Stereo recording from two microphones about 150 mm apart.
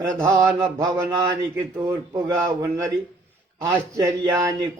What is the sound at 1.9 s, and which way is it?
Speech, 25° right (ahead or behind).